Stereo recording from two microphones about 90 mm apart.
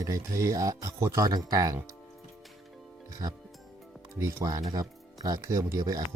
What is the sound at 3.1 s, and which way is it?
Speech, 45° right (ahead or behind).